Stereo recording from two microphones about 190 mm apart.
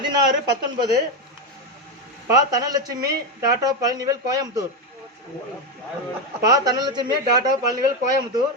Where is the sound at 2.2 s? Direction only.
20° right (ahead or behind).